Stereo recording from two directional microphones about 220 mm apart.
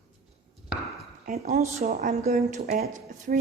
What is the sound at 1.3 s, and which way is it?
Speech, 35° right (ahead or behind).